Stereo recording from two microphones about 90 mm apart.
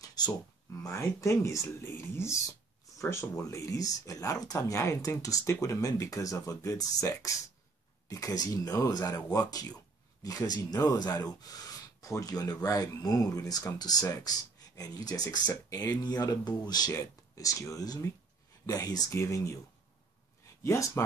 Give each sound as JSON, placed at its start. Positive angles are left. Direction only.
{"t": 0.0, "sound": "a sound", "side_deg": 50}
{"t": 0.8, "sound": "speech", "side_deg": 35}
{"t": 20.6, "sound": "speech", "side_deg": 30}